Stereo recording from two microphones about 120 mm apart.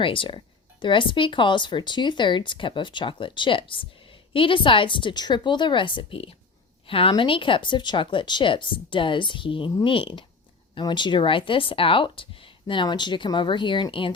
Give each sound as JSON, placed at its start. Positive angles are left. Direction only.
{"t": 0.0, "sound": "a woman's voice", "side_deg": 45}